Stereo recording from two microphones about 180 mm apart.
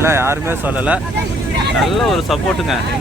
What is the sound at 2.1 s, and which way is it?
Speech, centre (ahead or behind).